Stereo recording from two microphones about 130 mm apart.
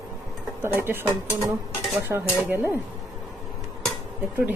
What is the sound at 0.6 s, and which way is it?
A woman's voice, 15° right (ahead or behind).